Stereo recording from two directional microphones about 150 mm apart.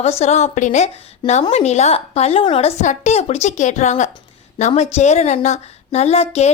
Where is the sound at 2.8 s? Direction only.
50° left (ahead or behind).